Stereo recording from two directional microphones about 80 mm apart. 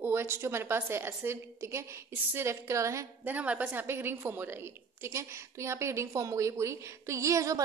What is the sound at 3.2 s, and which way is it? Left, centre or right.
A woman's voice, right.